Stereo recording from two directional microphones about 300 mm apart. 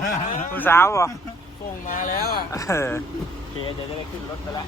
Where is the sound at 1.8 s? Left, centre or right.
Left.